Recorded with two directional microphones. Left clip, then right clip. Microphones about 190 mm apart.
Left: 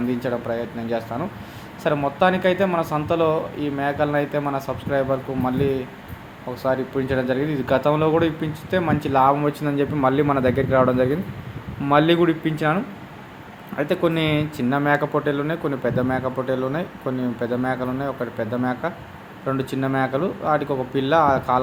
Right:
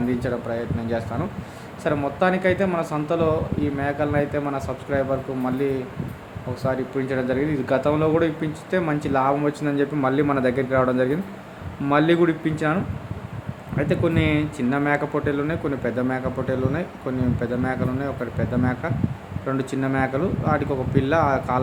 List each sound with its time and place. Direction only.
0.2 s speech: 5° left (ahead or behind)
6.6 s speech: 5° left (ahead or behind)